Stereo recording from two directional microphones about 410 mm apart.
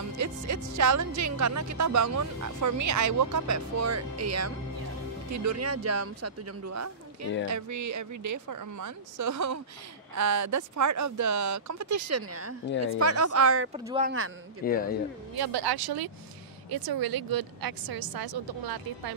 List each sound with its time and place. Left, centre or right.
0.2 s speech: right
13.7 s speech: centre
14.6 s speech: left
15.3 s a woman's voice: right